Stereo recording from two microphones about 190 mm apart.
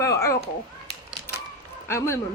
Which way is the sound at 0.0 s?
15° left (ahead or behind).